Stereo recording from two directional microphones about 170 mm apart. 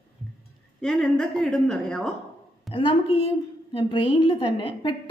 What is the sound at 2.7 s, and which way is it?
A woman's voice, 30° left (ahead or behind).